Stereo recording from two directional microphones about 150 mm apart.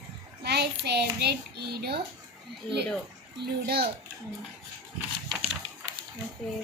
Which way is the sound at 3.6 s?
90° right.